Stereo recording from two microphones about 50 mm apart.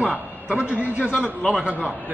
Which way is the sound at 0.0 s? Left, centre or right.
Right.